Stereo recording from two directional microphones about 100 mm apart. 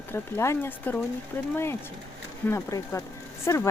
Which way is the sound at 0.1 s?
25° left (ahead or behind).